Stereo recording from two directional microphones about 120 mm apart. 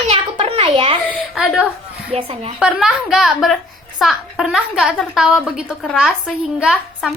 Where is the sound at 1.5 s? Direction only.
10° right (ahead or behind).